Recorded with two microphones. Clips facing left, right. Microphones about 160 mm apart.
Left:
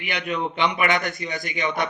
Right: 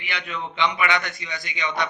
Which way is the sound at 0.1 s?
45° left (ahead or behind).